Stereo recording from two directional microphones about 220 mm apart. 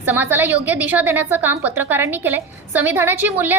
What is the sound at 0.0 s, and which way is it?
A woman's voice, 10° right (ahead or behind).